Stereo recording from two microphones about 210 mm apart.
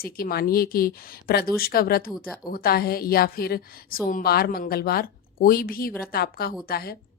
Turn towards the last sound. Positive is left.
turn(degrees=45)  # may be behind; listen again after turning